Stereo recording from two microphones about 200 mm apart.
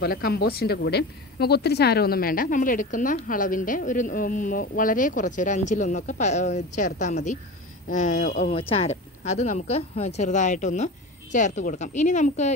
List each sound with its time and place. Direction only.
0.0 s speech: 50° left (ahead or behind)